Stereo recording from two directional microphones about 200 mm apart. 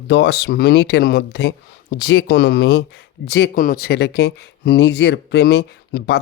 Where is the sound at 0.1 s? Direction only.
60° left (ahead or behind).